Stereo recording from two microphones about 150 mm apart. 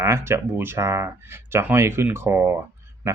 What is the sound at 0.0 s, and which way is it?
Speech, 20° right (ahead or behind).